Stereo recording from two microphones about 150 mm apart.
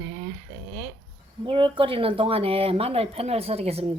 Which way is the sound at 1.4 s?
35° right (ahead or behind).